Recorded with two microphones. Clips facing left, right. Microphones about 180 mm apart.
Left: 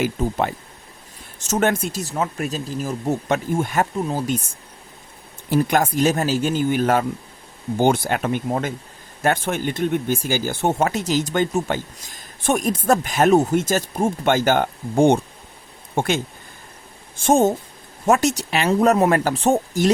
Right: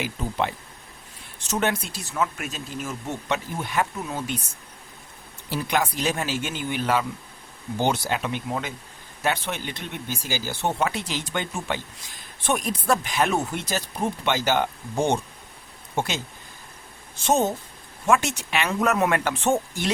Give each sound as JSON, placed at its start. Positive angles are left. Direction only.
{"t": 0.0, "sound": "speech", "side_deg": 45}
{"t": 2.1, "sound": "speech", "side_deg": 35}
{"t": 3.9, "sound": "speech", "side_deg": 35}
{"t": 5.5, "sound": "speech", "side_deg": 45}
{"t": 18.0, "sound": "speech", "side_deg": 40}